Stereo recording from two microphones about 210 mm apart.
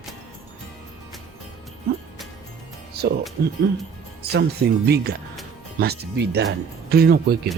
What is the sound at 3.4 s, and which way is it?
Speech, 45° right (ahead or behind).